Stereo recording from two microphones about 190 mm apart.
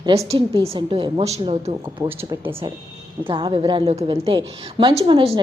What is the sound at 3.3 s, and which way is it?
A woman's voice, 25° right (ahead or behind).